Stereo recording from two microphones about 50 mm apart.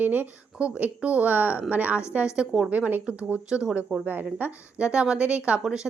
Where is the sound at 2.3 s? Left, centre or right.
Centre.